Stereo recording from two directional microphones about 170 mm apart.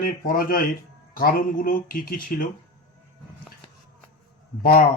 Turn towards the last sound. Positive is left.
turn(degrees=60)  # may be behind; listen again after turning